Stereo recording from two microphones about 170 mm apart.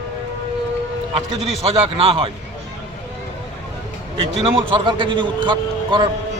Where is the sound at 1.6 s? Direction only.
35° right (ahead or behind).